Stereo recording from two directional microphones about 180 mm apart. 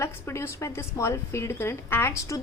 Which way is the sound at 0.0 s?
15° left (ahead or behind).